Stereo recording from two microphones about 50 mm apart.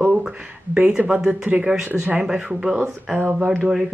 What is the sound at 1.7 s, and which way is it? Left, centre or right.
Speech, centre.